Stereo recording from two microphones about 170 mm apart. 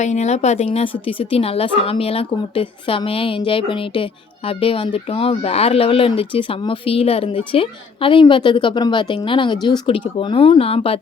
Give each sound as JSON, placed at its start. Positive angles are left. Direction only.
{"t": 0.0, "sound": "a woman's voice", "side_deg": 40}